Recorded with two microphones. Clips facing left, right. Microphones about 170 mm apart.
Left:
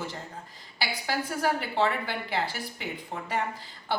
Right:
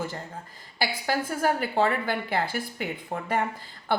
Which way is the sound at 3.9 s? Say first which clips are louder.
Right 4 dB; 55° right (ahead or behind).